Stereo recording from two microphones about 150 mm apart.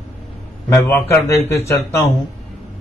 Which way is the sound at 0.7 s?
15° left (ahead or behind).